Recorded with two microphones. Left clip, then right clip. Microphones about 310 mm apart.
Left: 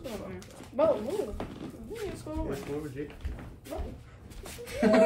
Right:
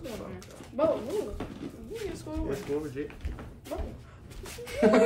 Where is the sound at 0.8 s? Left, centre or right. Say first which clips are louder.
Left 1 dB; left.